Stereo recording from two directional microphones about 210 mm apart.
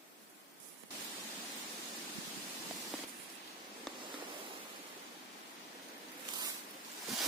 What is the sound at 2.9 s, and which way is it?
Spray, 5° right (ahead or behind).